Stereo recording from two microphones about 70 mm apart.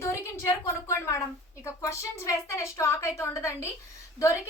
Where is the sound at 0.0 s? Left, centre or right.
Left.